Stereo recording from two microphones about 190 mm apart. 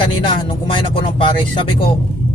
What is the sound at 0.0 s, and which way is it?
Speech, 25° left (ahead or behind).